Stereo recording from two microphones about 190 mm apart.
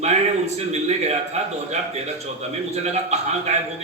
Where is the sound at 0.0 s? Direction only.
35° right (ahead or behind).